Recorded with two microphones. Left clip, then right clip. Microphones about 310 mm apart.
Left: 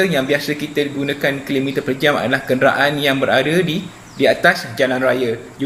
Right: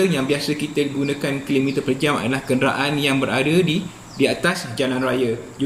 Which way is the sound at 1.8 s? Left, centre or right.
Centre.